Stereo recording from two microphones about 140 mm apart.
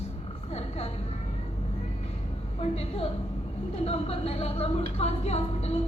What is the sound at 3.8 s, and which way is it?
Speech, 45° left (ahead or behind).